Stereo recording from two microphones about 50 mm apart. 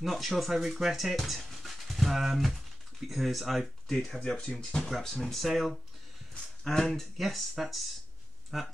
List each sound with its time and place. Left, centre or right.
0.0 s speech: centre
4.2 s speech: centre